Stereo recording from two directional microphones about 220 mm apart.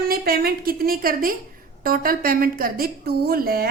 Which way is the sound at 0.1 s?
40° right (ahead or behind).